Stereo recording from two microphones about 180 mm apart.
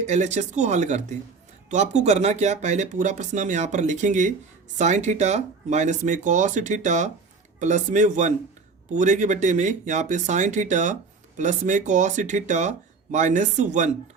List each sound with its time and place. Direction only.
0.1 s speech: 40° right (ahead or behind)